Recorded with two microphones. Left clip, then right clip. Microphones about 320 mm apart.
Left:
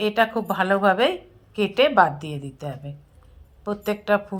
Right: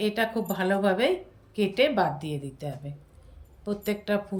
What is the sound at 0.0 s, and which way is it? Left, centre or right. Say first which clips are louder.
A woman's voice: left 6 dB; centre.